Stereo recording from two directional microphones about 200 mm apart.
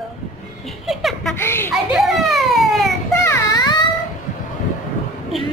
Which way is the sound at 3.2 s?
15° left (ahead or behind).